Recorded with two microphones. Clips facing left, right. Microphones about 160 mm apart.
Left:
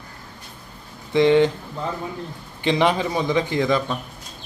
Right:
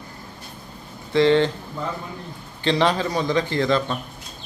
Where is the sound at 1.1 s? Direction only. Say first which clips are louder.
Left 1 dB; 15° left (ahead or behind).